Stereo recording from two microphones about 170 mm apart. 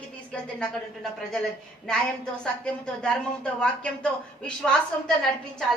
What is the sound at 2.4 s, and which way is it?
A woman's voice, 5° left (ahead or behind).